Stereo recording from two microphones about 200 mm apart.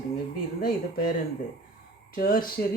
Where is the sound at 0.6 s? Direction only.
50° left (ahead or behind).